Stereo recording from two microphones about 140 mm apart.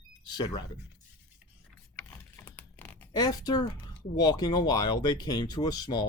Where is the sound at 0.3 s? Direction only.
30° left (ahead or behind).